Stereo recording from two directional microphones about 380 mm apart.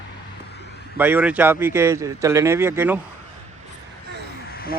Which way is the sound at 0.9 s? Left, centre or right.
Centre.